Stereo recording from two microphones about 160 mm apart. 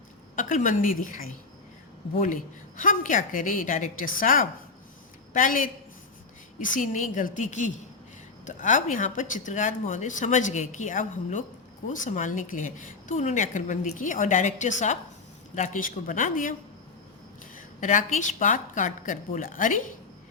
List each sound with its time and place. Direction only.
0.3 s a woman's voice: 55° left (ahead or behind)